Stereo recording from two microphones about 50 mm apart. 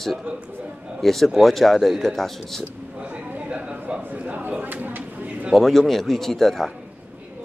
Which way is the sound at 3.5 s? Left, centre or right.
Right.